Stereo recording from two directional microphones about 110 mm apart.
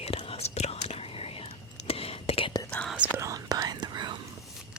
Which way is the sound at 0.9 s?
60° left (ahead or behind).